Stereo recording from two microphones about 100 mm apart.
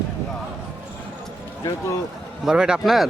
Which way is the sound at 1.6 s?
40° left (ahead or behind).